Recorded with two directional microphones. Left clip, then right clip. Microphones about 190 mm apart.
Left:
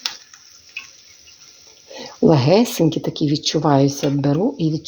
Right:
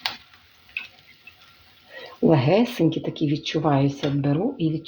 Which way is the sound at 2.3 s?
50° left (ahead or behind).